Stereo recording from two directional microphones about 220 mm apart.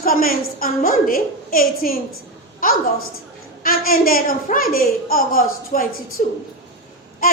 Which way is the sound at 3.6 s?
40° left (ahead or behind).